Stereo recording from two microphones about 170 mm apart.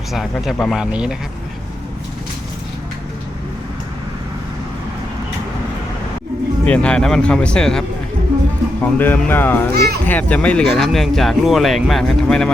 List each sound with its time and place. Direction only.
0.1 s speech: centre (ahead or behind)
6.7 s speech: 5° left (ahead or behind)
9.7 s a child's voice: 65° right (ahead or behind)
10.1 s speech: 10° left (ahead or behind)